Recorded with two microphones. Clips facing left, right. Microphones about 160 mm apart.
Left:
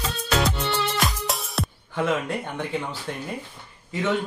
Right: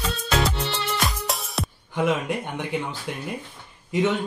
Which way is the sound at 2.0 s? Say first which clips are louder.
Right 1 dB; 15° right (ahead or behind).